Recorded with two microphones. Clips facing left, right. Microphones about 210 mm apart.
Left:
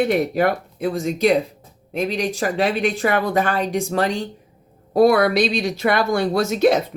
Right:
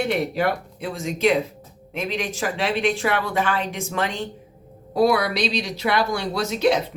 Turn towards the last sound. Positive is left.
turn(degrees=50)  # may be behind; listen again after turning